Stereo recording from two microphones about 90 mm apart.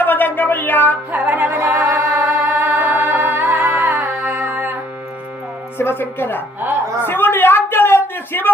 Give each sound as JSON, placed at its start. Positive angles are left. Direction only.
{"t": 0.0, "sound": "a sound", "side_deg": 20}
{"t": 1.1, "sound": "music", "side_deg": -20}
{"t": 5.7, "sound": "speech", "side_deg": 25}